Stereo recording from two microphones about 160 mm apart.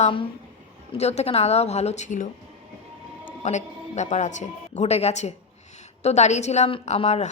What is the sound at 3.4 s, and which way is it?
A woman's voice, 45° left (ahead or behind).